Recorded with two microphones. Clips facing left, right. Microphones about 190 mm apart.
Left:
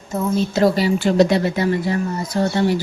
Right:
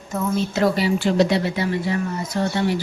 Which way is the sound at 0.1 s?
35° left (ahead or behind).